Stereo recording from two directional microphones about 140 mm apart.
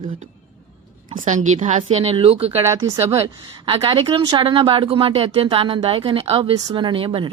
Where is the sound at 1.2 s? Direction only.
60° right (ahead or behind).